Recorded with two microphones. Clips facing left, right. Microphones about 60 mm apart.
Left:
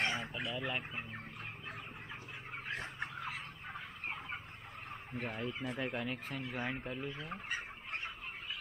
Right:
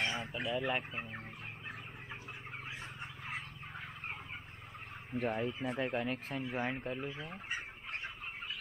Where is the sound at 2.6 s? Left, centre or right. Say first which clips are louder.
Left 8 dB; left.